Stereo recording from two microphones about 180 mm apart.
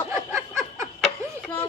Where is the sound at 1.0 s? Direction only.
5° left (ahead or behind).